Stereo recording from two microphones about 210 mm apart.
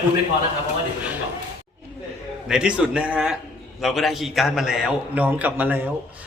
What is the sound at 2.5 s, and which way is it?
A man's voice, 5° right (ahead or behind).